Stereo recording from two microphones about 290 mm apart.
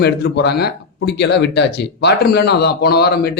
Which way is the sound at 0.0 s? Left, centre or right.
Left.